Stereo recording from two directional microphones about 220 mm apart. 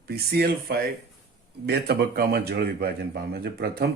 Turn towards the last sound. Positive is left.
turn(degrees=-45)  # may be behind; listen again after turning